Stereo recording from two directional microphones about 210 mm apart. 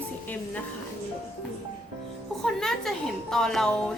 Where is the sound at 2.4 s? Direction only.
Centre (ahead or behind).